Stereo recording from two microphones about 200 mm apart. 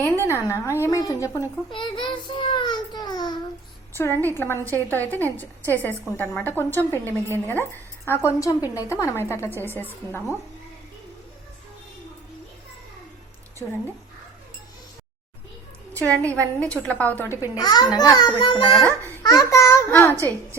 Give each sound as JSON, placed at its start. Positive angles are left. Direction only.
{"t": 0.0, "sound": "a child's voice", "side_deg": 15}
{"t": 15.9, "sound": "a woman's voice", "side_deg": 10}
{"t": 17.3, "sound": "a child's voice", "side_deg": -10}
{"t": 17.6, "sound": "a child's voice", "side_deg": 20}
{"t": 18.9, "sound": "a woman's voice", "side_deg": 15}